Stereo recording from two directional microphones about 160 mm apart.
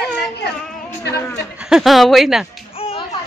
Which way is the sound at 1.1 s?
15° left (ahead or behind).